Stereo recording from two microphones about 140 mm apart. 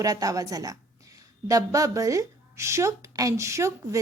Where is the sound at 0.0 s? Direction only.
25° right (ahead or behind).